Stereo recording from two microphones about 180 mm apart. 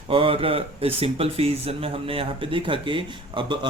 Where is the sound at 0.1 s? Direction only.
30° right (ahead or behind).